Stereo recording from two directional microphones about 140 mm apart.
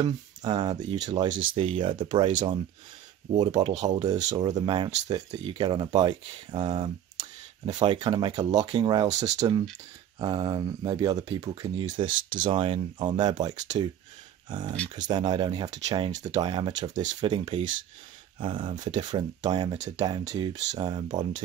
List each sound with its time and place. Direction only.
0.0 s speech: 30° right (ahead or behind)
3.3 s speech: 35° right (ahead or behind)